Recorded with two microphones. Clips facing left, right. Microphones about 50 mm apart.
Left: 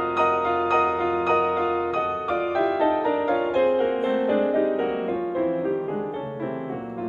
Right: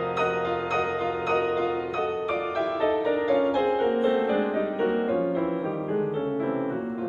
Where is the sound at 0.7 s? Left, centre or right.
Centre.